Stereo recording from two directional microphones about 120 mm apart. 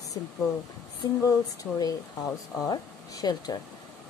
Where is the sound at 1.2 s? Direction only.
30° left (ahead or behind).